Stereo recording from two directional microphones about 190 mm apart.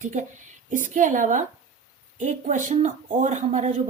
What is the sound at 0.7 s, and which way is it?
A woman's voice, 40° right (ahead or behind).